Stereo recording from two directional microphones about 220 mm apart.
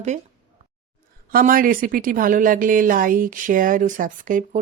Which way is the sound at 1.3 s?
40° right (ahead or behind).